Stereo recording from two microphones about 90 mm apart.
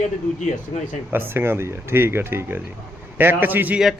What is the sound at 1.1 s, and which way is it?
Speech, 25° right (ahead or behind).